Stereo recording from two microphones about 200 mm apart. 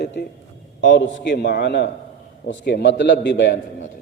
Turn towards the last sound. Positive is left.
turn(degrees=60)  # may be behind; listen again after turning